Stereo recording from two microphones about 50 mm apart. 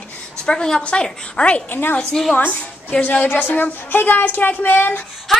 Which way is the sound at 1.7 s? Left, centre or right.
Left.